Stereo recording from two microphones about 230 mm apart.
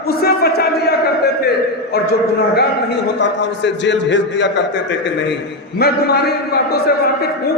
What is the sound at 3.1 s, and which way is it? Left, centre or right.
A man's voice, left.